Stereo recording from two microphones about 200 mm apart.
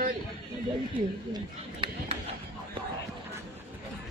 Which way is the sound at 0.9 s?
25° right (ahead or behind).